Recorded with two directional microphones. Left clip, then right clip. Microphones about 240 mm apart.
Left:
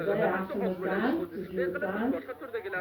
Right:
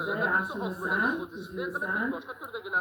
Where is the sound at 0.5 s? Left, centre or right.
Right.